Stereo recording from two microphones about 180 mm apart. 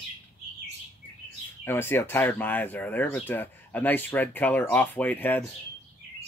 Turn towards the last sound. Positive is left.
turn(degrees=10)  # may be behind; listen again after turning